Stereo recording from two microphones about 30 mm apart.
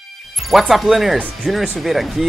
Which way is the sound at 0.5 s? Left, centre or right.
Centre.